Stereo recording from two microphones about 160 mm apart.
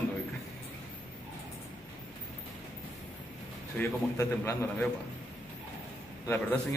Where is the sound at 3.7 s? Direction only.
15° left (ahead or behind).